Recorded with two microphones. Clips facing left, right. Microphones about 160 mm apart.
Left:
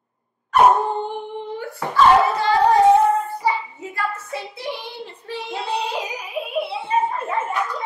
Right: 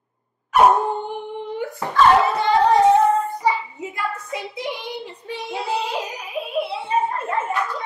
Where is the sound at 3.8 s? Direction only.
15° right (ahead or behind).